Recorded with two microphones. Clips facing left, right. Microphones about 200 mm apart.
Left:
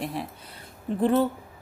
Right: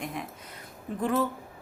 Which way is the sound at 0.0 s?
35° left (ahead or behind).